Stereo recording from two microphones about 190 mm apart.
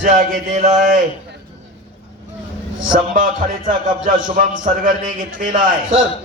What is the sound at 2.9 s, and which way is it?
Speech, 45° right (ahead or behind).